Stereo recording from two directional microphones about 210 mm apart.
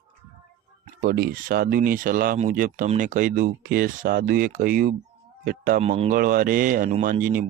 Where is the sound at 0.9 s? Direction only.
45° right (ahead or behind).